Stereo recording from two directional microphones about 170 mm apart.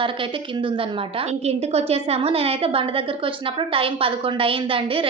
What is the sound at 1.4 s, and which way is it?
A woman's voice, 35° right (ahead or behind).